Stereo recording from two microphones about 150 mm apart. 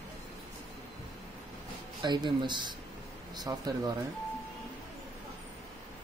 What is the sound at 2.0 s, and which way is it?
Speech, 30° right (ahead or behind).